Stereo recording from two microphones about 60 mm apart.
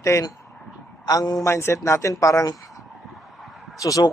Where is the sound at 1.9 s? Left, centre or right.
Left.